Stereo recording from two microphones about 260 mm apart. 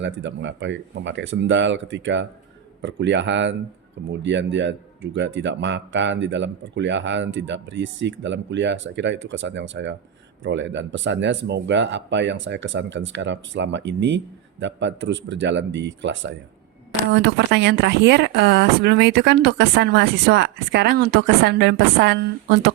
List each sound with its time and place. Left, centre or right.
0.0 s speech: right